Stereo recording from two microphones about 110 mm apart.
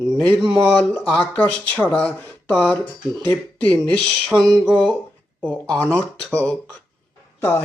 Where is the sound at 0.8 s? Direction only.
10° left (ahead or behind).